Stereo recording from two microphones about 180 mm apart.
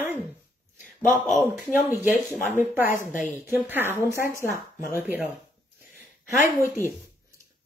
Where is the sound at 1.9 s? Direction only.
15° left (ahead or behind).